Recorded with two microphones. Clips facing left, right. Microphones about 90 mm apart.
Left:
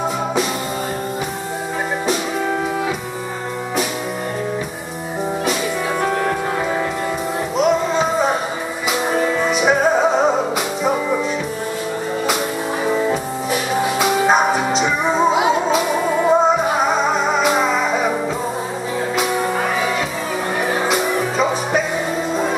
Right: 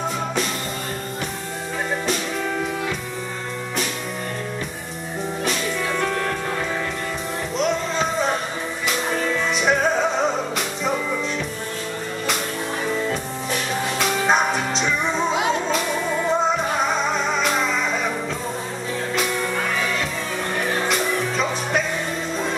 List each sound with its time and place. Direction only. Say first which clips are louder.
5.9 s music: left 6 dB; 20° left (ahead or behind)
7.5 s music: left 6 dB; 5° left (ahead or behind)
10.1 s music: left 6 dB; 40° left (ahead or behind)
13.1 s music: left 5 dB; 5° left (ahead or behind)
19.1 s music: left 4 dB; 5° left (ahead or behind)
20.6 s music: left 4 dB; 10° left (ahead or behind)